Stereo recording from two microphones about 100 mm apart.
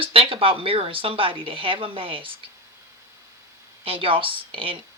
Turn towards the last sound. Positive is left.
turn(degrees=-65)  # may be behind; listen again after turning